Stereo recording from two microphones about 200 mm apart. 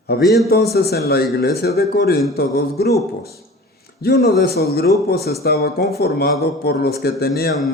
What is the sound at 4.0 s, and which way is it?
Speech, 50° left (ahead or behind).